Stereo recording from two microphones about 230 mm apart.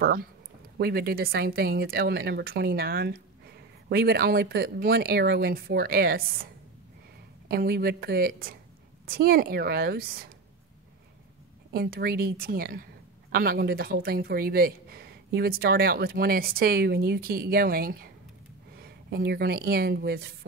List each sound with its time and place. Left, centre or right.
0.0 s speech: right
11.7 s a woman's voice: right